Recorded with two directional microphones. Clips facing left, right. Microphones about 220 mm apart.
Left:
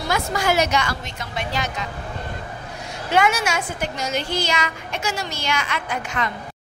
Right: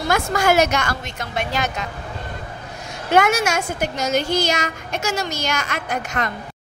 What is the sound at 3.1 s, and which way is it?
A woman's voice, 45° right (ahead or behind).